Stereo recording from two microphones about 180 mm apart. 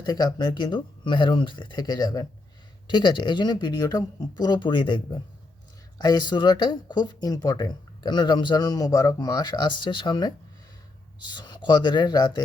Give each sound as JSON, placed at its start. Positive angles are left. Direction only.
{"t": 0.0, "sound": "speech", "side_deg": 25}